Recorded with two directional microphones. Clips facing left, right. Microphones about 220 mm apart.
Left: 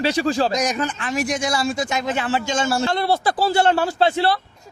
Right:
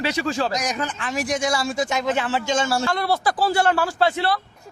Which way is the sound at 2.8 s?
25° left (ahead or behind).